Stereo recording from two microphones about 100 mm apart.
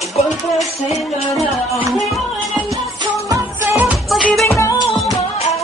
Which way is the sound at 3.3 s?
25° right (ahead or behind).